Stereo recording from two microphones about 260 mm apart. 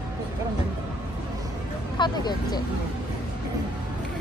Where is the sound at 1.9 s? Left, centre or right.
Centre.